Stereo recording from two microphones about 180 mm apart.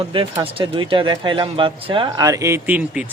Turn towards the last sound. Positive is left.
turn(degrees=-10)  # may be behind; listen again after turning